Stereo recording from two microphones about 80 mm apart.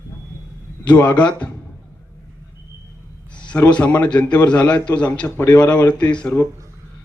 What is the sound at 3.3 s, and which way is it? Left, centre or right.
A man's voice, centre.